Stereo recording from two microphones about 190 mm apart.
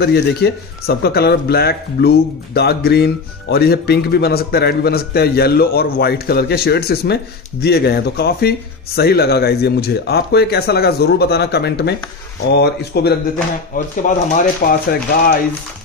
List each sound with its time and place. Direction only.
0.0 s a man's voice: 55° left (ahead or behind)
13.7 s speech: 45° left (ahead or behind)